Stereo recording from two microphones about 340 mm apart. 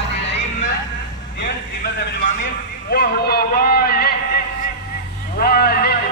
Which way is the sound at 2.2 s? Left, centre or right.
Left.